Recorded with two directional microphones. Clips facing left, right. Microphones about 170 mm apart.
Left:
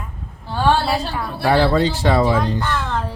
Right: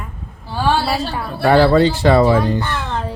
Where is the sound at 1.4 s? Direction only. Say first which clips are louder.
Right 4 dB; 60° right (ahead or behind).